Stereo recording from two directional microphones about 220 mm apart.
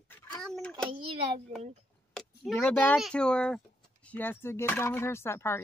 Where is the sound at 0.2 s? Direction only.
5° left (ahead or behind).